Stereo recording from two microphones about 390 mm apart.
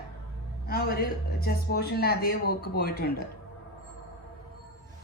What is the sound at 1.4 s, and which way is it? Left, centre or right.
Speech, left.